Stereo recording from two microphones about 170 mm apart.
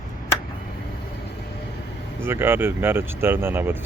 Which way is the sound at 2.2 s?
15° right (ahead or behind).